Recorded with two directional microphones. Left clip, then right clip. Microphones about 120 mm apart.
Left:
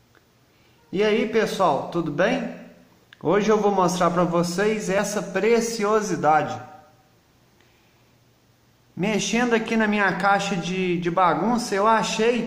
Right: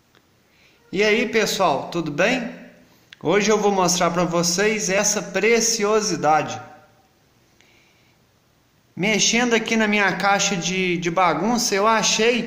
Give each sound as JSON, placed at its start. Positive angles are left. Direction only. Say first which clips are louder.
{"t": 0.9, "sound": "a man's voice", "louder": "right 2 dB", "side_deg": -15}
{"t": 8.9, "sound": "a man's voice", "louder": "right 5 dB", "side_deg": -15}